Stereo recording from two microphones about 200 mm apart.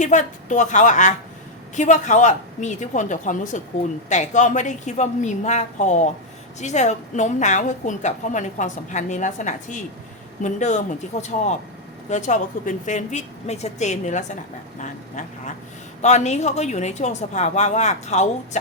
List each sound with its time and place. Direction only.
0.0 s a woman's voice: 35° left (ahead or behind)